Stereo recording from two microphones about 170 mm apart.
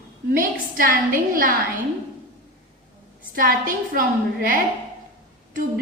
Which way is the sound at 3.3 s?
55° right (ahead or behind).